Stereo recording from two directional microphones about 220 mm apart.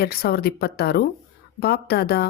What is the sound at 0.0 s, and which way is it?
Speech, 45° left (ahead or behind).